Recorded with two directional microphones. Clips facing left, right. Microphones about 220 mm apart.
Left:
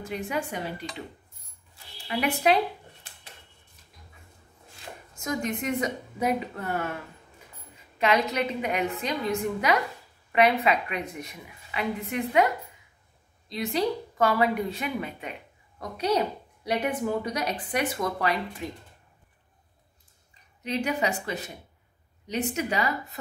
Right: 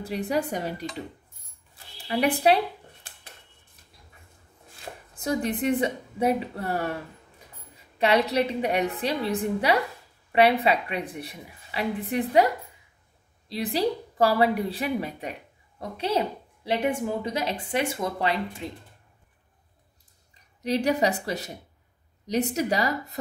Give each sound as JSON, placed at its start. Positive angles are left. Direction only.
{"t": 0.0, "sound": "a woman's voice", "side_deg": -35}
{"t": 2.0, "sound": "a woman's voice", "side_deg": -35}
{"t": 5.1, "sound": "a woman's voice", "side_deg": -35}
{"t": 8.0, "sound": "a woman's voice", "side_deg": -35}
{"t": 13.5, "sound": "a woman's voice", "side_deg": -35}
{"t": 20.6, "sound": "a woman's voice", "side_deg": -35}